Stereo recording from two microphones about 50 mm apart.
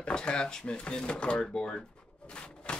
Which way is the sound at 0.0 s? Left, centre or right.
Centre.